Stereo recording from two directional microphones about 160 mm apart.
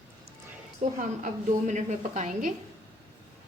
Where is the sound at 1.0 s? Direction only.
50° right (ahead or behind).